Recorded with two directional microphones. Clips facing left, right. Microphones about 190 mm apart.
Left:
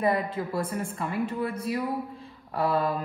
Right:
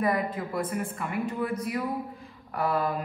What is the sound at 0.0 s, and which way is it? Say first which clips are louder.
Speech: left 1 dB; 30° left (ahead or behind).